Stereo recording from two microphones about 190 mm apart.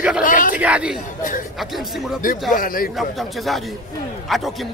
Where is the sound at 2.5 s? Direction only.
45° left (ahead or behind).